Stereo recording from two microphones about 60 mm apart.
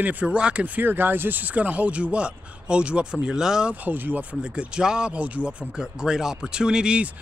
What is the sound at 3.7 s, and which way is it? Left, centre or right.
Speech, right.